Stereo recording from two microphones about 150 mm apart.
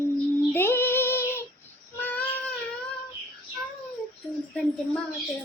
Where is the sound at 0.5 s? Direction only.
15° left (ahead or behind).